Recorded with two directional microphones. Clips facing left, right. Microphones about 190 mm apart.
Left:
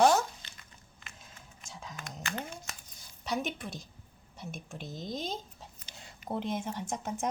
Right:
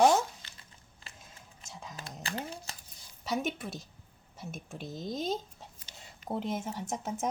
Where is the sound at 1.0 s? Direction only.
30° right (ahead or behind).